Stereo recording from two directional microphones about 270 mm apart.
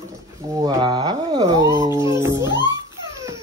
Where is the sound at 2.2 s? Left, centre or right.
Centre.